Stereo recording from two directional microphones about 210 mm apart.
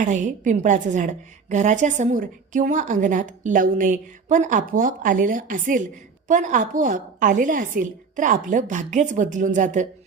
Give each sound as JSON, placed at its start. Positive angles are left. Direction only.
{"t": 0.0, "sound": "a woman's voice", "side_deg": -35}